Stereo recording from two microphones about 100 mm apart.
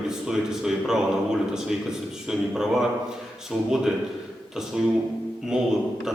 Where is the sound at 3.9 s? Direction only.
5° right (ahead or behind).